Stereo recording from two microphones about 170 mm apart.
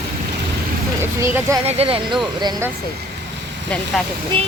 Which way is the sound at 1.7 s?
35° right (ahead or behind).